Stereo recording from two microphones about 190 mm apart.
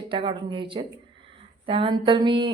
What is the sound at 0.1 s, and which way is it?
Speech, 25° right (ahead or behind).